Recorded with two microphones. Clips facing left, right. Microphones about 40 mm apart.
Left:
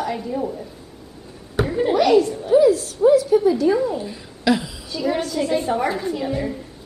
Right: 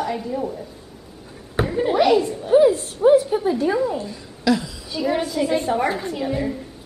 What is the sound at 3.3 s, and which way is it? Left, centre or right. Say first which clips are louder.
Speech: left 4 dB; right.